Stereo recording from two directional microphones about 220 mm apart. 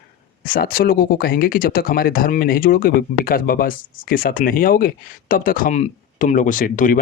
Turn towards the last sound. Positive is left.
turn(degrees=40)  # may be behind; listen again after turning